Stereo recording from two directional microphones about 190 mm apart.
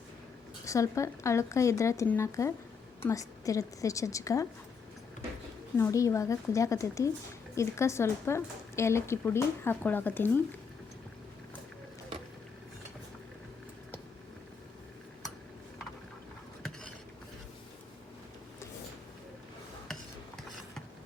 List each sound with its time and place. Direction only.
0.6 s a woman's voice: 15° left (ahead or behind)
5.7 s a woman's voice: 15° left (ahead or behind)